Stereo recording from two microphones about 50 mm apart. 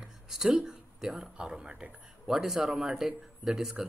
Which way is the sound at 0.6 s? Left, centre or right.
Centre.